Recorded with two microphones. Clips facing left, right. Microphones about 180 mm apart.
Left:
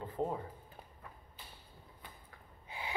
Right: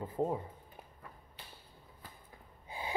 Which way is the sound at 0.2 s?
10° right (ahead or behind).